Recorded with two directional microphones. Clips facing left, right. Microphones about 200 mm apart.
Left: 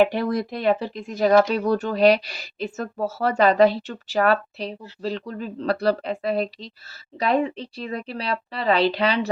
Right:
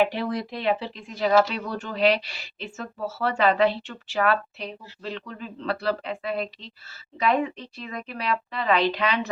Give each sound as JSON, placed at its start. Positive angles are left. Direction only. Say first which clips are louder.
{"t": 0.0, "sound": "speech", "louder": "left 4 dB", "side_deg": 45}